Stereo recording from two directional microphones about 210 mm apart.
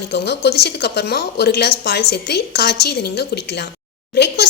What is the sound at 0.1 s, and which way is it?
A woman's voice, 55° left (ahead or behind).